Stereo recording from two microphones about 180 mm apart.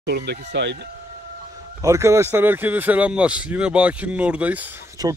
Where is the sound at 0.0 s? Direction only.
70° right (ahead or behind).